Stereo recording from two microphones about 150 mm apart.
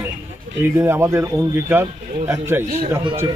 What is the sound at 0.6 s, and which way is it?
Speech, 15° right (ahead or behind).